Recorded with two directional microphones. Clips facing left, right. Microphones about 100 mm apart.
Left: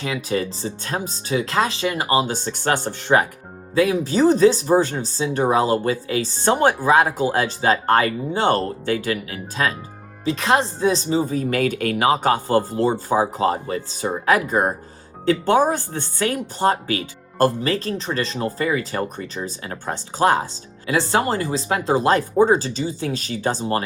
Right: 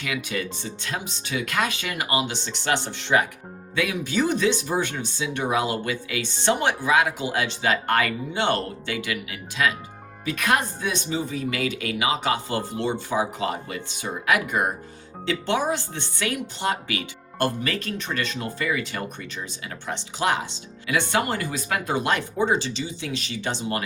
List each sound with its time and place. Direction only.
0.0 s speech: 30° left (ahead or behind)
10.2 s speech: 25° left (ahead or behind)